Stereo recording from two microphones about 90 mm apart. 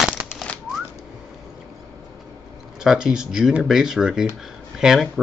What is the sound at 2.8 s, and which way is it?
Speech, 5° right (ahead or behind).